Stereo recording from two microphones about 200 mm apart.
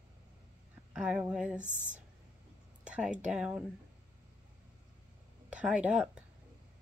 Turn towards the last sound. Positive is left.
turn(degrees=-5)  # may be behind; listen again after turning